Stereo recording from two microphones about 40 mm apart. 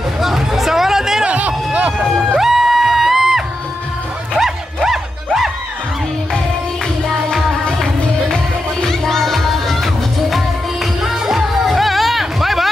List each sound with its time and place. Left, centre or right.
0.2 s music: centre
1.2 s a sound: right
2.0 s music: centre
4.8 s music: centre
8.8 s music: centre
11.0 s music: centre